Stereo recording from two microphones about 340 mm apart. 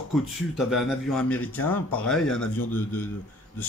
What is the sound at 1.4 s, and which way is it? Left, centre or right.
Speech, left.